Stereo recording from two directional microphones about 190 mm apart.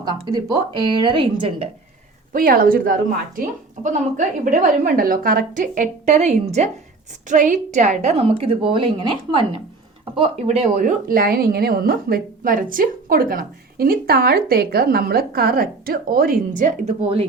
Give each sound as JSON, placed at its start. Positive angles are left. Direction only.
{"t": 0.0, "sound": "speech", "side_deg": -20}
{"t": 2.3, "sound": "a woman's voice", "side_deg": -50}